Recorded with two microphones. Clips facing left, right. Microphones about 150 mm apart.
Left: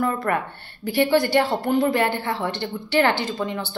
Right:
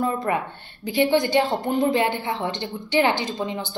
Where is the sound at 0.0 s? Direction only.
20° right (ahead or behind).